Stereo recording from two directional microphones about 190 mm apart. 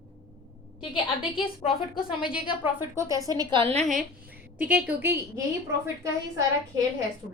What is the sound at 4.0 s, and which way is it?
A woman's voice, 5° right (ahead or behind).